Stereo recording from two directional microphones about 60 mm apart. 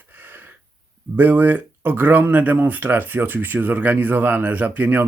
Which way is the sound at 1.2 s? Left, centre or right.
Right.